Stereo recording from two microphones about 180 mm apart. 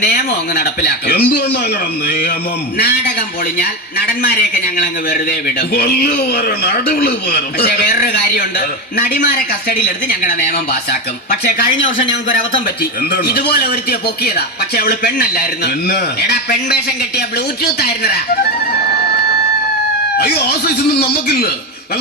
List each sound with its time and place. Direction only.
0.0 s a man's voice: 60° left (ahead or behind); by 12.0 s 90° left
12.3 s a man's voice: 60° left (ahead or behind)
20.1 s a man's voice: 60° left (ahead or behind)